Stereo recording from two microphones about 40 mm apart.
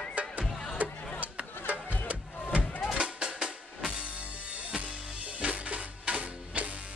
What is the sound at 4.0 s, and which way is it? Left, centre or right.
Music, right.